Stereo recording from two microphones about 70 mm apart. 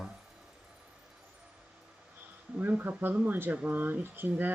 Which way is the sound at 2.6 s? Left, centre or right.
Right.